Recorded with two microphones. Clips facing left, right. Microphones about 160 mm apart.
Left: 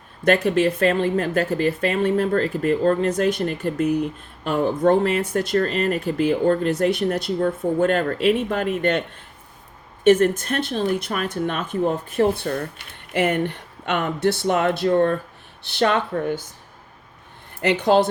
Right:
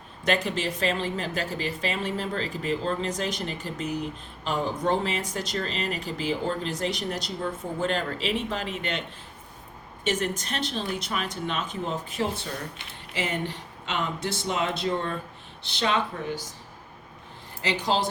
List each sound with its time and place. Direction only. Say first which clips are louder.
0.3 s speech: left 9 dB; 55° left (ahead or behind)
17.6 s speech: left 9 dB; 60° left (ahead or behind)